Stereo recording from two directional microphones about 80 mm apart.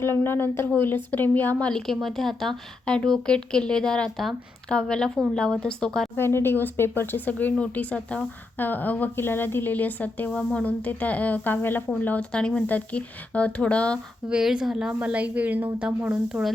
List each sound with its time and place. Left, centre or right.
0.0 s a woman's voice: left; by 6.1 s centre
6.1 s a woman's voice: left; by 14.0 s centre
14.3 s a woman's voice: centre